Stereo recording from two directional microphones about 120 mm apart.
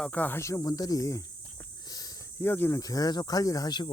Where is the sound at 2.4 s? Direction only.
20° left (ahead or behind).